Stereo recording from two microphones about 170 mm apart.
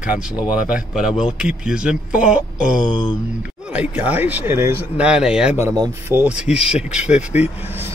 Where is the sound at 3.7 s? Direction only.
10° right (ahead or behind).